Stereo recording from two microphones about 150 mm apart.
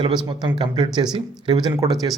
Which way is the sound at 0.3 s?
30° right (ahead or behind).